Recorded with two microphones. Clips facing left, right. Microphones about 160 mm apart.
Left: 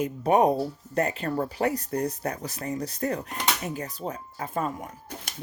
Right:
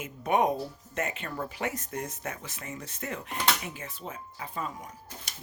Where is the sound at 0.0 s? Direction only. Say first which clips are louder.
Left 5 dB; 35° left (ahead or behind).